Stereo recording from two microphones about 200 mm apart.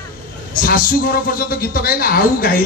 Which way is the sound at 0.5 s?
45° left (ahead or behind).